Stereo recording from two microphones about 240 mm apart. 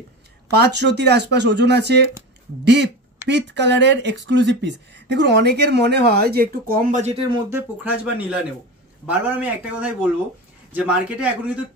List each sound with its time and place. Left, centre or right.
0.5 s speech: right
7.5 s speech: centre